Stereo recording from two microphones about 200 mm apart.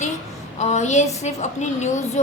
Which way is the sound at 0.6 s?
35° left (ahead or behind).